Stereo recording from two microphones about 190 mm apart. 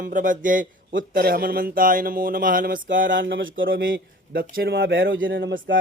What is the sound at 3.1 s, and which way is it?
Speech, 80° right.